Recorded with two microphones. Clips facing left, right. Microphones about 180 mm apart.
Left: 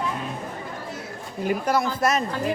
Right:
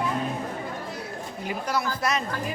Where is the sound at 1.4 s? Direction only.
50° left (ahead or behind).